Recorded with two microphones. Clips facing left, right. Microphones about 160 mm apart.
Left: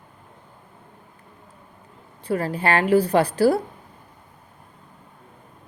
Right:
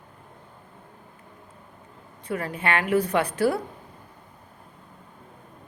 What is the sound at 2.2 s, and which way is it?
A woman's voice, 35° left (ahead or behind).